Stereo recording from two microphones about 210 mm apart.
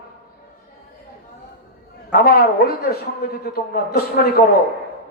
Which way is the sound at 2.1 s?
45° left (ahead or behind).